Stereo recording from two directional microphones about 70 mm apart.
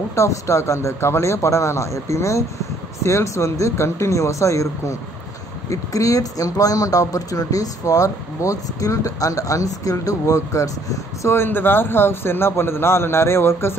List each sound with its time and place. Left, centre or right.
0.1 s speech: left
11.3 s a man's voice: left